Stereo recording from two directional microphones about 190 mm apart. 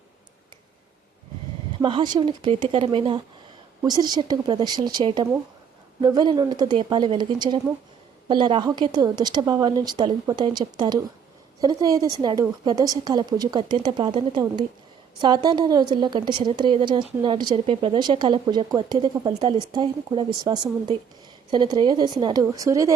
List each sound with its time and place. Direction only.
1.8 s a woman's voice: 25° right (ahead or behind)